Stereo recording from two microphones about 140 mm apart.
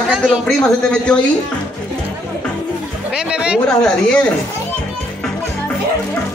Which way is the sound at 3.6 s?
5° left (ahead or behind).